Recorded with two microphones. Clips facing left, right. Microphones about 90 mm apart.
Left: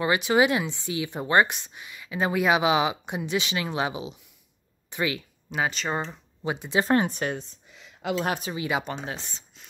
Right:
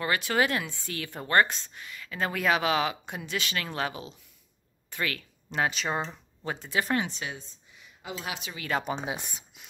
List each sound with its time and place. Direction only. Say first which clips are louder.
0.0 s speech: left 5 dB; 15° left (ahead or behind)
5.5 s speech: left 1 dB; centre (ahead or behind)
6.4 s speech: left 5 dB; 15° left (ahead or behind)
6.8 s speech: left 5 dB; 35° left (ahead or behind)
7.1 s speech: left 8 dB; 50° left (ahead or behind)
7.7 s a sound: left 11 dB; 80° left
8.3 s speech: left 8 dB; 40° left (ahead or behind)
8.5 s speech: left 3 dB; 10° left (ahead or behind)
9.0 s speech: right 1 dB; 10° right (ahead or behind)